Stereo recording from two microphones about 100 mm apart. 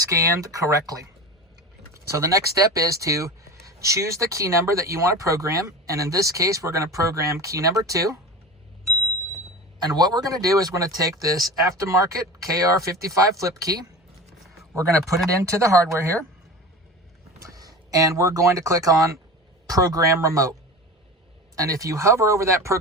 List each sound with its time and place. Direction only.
0.0 s speech: 30° right (ahead or behind)
9.8 s a man's voice: 40° right (ahead or behind)
17.4 s speech: 35° right (ahead or behind)
21.5 s speech: 35° right (ahead or behind)